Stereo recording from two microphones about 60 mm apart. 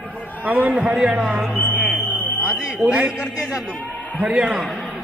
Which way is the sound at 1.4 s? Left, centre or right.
Centre.